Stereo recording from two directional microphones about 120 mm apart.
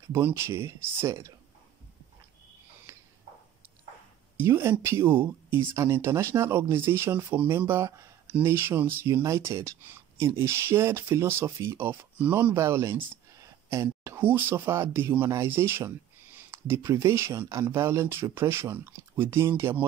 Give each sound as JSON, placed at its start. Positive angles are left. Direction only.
{"t": 0.1, "sound": "speech", "side_deg": -25}
{"t": 2.9, "sound": "a sound", "side_deg": -20}
{"t": 4.4, "sound": "speech", "side_deg": -20}